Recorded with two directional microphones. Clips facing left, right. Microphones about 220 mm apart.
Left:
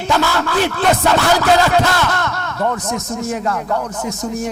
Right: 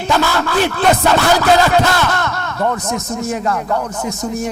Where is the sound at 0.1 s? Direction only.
20° right (ahead or behind).